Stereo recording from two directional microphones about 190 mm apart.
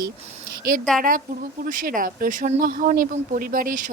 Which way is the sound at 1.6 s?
45° right (ahead or behind).